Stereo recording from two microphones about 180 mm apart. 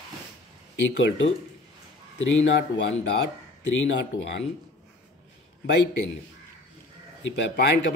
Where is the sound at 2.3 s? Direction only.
80° left.